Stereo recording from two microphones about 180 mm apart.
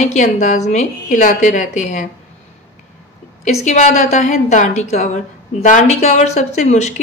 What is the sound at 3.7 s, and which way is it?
Speech, 40° left (ahead or behind).